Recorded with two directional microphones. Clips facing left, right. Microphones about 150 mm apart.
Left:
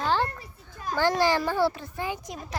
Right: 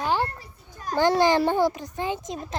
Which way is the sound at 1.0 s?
20° right (ahead or behind).